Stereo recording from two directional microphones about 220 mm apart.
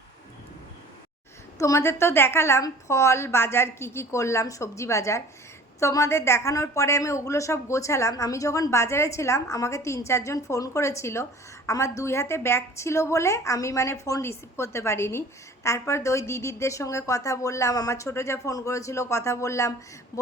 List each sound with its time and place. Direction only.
1.5 s a woman's voice: 15° left (ahead or behind)